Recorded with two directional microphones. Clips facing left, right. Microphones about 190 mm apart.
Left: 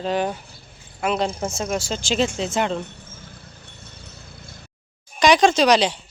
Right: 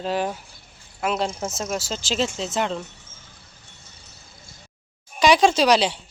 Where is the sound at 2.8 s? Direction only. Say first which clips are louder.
Left 4 dB; 60° left (ahead or behind).